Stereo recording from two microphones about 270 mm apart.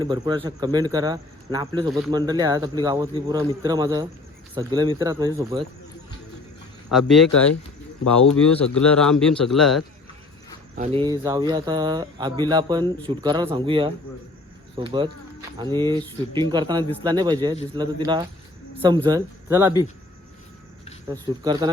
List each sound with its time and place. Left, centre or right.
0.0 s speech: centre
6.9 s speech: centre
8.4 s speech: centre
10.8 s speech: right
21.1 s speech: centre